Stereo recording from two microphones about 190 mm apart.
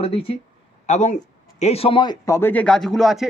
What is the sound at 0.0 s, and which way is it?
Speech, 30° left (ahead or behind).